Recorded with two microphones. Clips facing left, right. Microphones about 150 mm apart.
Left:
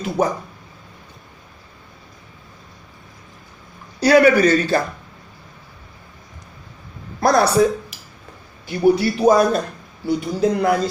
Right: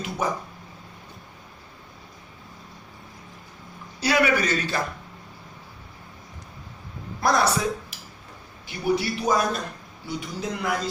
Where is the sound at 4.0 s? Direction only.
40° left (ahead or behind).